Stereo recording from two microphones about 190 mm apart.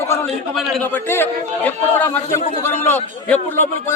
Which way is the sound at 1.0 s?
10° left (ahead or behind).